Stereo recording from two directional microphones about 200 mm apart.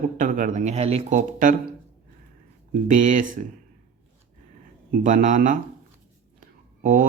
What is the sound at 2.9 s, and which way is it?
Speech, 40° right (ahead or behind).